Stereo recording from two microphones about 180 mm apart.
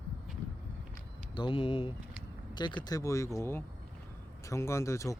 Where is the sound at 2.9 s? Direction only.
15° left (ahead or behind).